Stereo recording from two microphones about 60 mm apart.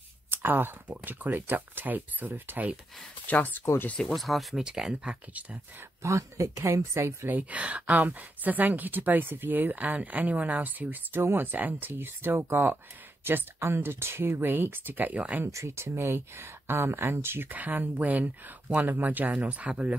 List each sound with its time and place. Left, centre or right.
0.3 s speech: right
3.3 s speech: left
4.0 s speech: centre
4.6 s speech: centre
5.0 s speech: right
6.0 s speech: right
7.2 s speech: right
15.4 s speech: right
17.5 s speech: right